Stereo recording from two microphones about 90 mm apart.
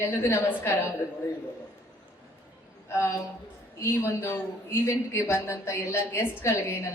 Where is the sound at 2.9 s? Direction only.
30° left (ahead or behind).